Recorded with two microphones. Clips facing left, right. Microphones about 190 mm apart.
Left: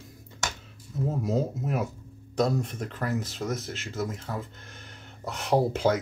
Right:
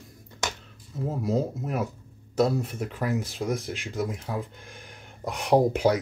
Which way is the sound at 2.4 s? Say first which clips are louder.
Right 2 dB; 5° right (ahead or behind).